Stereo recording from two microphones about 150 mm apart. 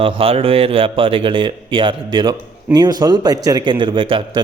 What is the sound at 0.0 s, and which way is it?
A man's voice, 40° right (ahead or behind).